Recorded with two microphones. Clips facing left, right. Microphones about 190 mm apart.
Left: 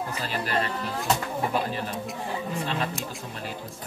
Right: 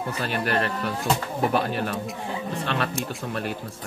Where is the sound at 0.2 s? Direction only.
65° right (ahead or behind).